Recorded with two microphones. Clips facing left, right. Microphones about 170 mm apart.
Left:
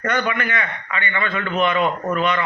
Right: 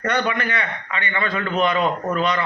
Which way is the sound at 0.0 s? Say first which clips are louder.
Even; 35° right (ahead or behind).